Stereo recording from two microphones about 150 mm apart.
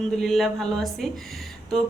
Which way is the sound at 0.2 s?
Centre (ahead or behind).